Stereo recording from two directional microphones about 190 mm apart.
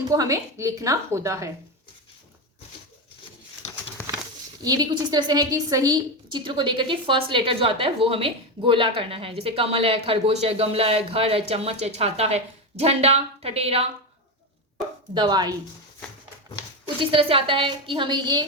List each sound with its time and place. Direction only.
0.1 s a woman's voice: 15° right (ahead or behind)
4.6 s a woman's voice: 20° right (ahead or behind)
15.1 s a woman's voice: 25° right (ahead or behind)
17.0 s a woman's voice: 30° right (ahead or behind)